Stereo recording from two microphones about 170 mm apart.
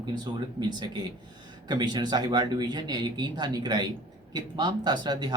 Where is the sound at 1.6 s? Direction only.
25° right (ahead or behind).